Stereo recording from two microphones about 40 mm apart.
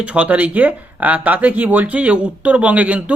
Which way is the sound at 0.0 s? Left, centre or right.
Right.